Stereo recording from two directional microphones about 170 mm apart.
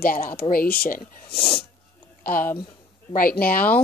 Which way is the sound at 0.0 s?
55° left (ahead or behind).